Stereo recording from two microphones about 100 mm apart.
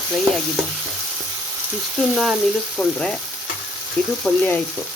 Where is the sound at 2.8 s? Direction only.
5° left (ahead or behind).